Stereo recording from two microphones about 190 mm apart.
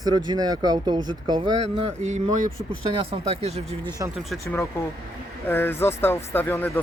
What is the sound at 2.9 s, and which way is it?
Speech, 30° right (ahead or behind).